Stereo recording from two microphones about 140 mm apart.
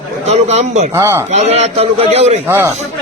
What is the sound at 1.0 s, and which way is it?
Speech, 20° right (ahead or behind).